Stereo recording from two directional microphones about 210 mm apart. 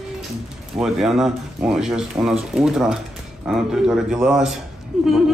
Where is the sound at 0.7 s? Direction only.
5° right (ahead or behind).